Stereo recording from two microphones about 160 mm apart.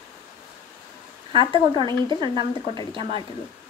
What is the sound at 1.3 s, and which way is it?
Speech, 30° left (ahead or behind).